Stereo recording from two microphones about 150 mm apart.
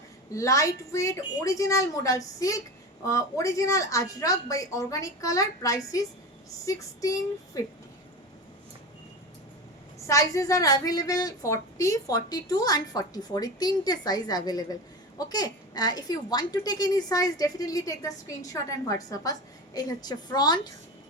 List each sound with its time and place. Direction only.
0.3 s a woman's voice: 20° left (ahead or behind)
10.1 s a woman's voice: 20° left (ahead or behind)